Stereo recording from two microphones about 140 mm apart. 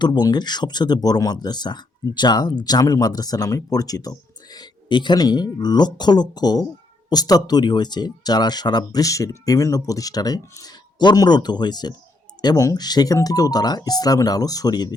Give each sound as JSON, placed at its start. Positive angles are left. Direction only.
{"t": 0.0, "sound": "speech", "side_deg": 30}